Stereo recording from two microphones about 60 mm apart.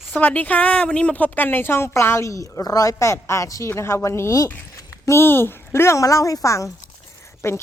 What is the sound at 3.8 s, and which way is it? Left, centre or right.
Speech, left.